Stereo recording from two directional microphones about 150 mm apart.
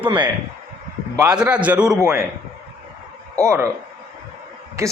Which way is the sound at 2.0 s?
15° right (ahead or behind).